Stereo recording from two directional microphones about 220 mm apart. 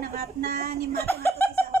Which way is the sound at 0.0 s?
45° right (ahead or behind).